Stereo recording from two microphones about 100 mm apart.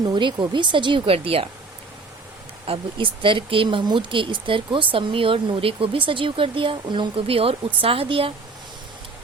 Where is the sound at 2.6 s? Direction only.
65° right (ahead or behind).